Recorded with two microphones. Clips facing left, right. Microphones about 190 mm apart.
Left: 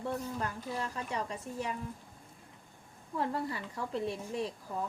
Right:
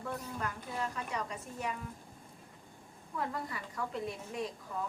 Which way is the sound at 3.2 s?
30° left (ahead or behind).